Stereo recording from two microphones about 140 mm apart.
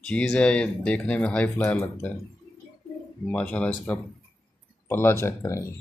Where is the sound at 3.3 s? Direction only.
10° left (ahead or behind).